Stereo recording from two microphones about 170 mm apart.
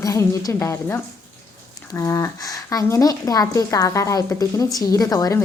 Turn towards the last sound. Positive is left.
turn(degrees=20)  # may be behind; listen again after turning